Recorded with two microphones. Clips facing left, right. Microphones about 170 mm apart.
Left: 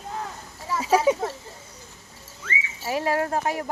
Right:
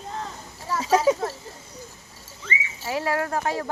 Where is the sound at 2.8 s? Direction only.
15° left (ahead or behind).